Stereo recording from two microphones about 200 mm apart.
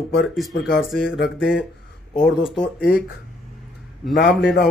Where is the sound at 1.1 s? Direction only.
65° left (ahead or behind).